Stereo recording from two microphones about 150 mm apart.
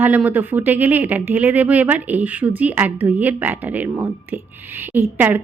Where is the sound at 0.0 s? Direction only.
10° right (ahead or behind).